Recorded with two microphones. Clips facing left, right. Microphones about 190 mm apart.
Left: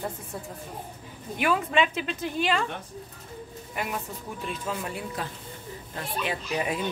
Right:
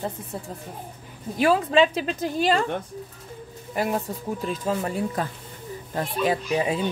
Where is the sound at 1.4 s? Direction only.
30° right (ahead or behind).